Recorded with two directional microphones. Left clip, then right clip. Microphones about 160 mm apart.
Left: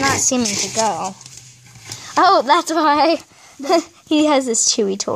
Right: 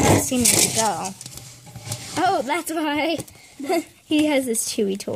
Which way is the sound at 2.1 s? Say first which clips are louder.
Left 9 dB; 15° right (ahead or behind).